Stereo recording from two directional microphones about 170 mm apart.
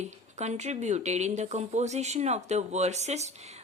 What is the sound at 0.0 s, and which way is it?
Speech, 40° right (ahead or behind).